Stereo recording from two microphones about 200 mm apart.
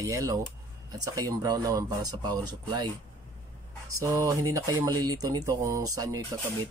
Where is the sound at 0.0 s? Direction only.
15° right (ahead or behind).